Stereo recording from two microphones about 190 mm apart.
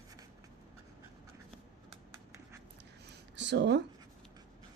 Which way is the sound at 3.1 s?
65° right (ahead or behind).